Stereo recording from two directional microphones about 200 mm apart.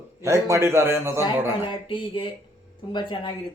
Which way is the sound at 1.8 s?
25° left (ahead or behind).